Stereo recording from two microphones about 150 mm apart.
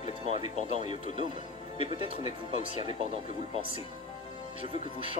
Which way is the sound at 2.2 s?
45° left (ahead or behind).